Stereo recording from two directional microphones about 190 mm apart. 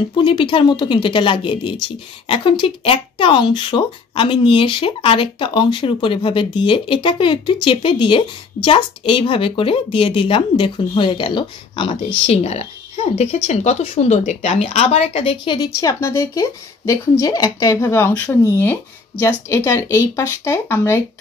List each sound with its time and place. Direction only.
0.1 s speech: 25° left (ahead or behind)
15.5 s speech: 20° left (ahead or behind)